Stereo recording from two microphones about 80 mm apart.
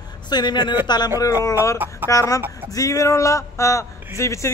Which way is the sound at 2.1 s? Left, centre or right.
Left.